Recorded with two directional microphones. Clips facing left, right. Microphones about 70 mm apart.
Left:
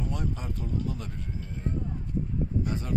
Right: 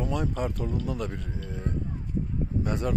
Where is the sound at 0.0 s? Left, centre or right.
Right.